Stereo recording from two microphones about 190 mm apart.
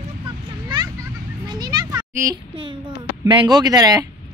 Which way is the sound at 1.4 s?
20° right (ahead or behind).